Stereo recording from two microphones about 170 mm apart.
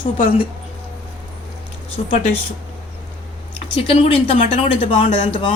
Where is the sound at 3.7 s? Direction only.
35° left (ahead or behind).